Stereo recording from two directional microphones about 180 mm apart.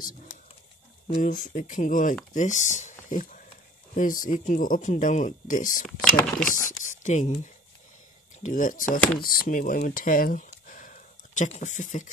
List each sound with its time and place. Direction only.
1.1 s speech: 45° left (ahead or behind)
6.1 s speech: 5° left (ahead or behind)
6.9 s speech: 40° left (ahead or behind)
8.4 s speech: 45° left (ahead or behind)